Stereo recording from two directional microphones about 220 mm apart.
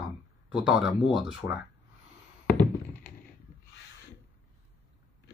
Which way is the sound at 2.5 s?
5° left (ahead or behind).